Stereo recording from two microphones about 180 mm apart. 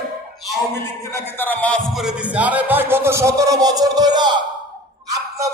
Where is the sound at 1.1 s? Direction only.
10° left (ahead or behind).